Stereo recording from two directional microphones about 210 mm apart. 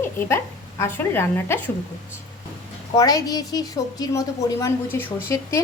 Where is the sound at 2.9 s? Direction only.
15° left (ahead or behind).